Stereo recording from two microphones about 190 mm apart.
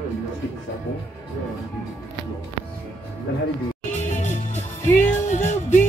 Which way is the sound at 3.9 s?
40° left (ahead or behind).